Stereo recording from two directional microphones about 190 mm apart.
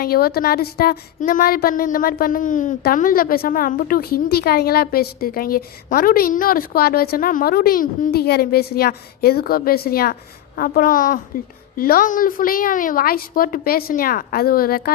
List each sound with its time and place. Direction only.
0.0 s speech: 55° left (ahead or behind)